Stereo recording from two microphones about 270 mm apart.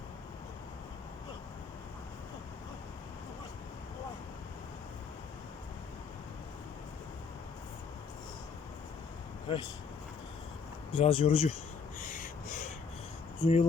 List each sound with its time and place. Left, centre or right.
9.5 s speech: centre
10.9 s speech: left
11.9 s gasp: left
13.4 s speech: left